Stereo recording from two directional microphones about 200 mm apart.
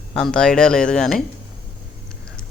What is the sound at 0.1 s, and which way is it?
Speech, 5° left (ahead or behind).